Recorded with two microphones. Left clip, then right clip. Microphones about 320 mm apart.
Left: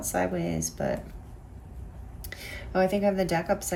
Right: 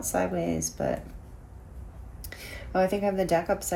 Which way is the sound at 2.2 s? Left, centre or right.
Centre.